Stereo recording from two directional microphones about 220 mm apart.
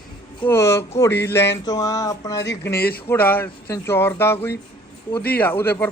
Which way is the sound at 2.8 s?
45° left (ahead or behind).